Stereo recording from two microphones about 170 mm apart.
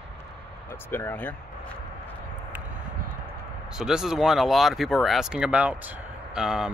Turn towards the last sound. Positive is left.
turn(degrees=-5)  # may be behind; listen again after turning